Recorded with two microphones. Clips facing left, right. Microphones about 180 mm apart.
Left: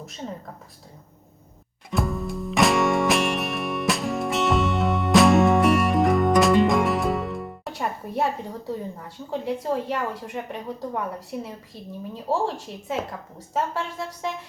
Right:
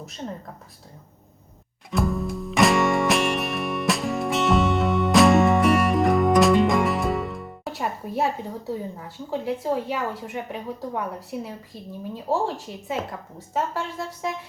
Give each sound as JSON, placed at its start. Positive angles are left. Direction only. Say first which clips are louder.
{"t": 0.0, "sound": "speech", "louder": "right 1 dB", "side_deg": 0}
{"t": 1.9, "sound": "music", "louder": "right 2 dB", "side_deg": 0}